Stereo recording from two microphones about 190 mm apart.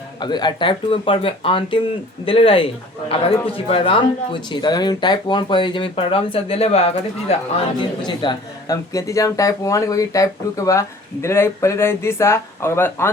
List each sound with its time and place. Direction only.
0.2 s speech: 25° left (ahead or behind)